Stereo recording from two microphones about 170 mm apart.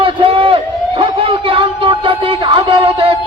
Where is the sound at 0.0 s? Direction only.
30° right (ahead or behind).